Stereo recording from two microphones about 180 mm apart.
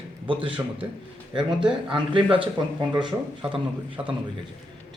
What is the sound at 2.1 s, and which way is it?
Speech, 30° right (ahead or behind).